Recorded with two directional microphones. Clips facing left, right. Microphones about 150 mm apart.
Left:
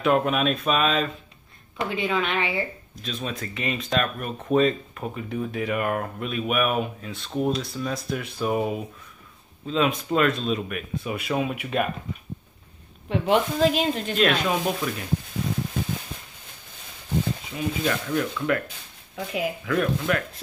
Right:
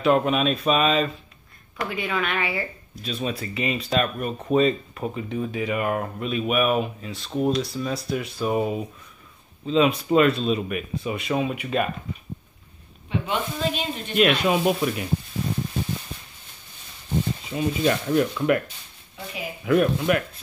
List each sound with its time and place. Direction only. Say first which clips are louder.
0.0 s speech: right 1 dB; centre (ahead or behind)
1.8 s speech: left 2 dB; 25° left (ahead or behind)
3.0 s speech: right 3 dB; 5° right (ahead or behind)
13.1 s speech: left 5 dB; 90° left
14.1 s speech: right 4 dB; 10° right (ahead or behind)
17.6 s speech: right 4 dB; 25° right (ahead or behind)
19.6 s speech: right 8 dB; 20° right (ahead or behind)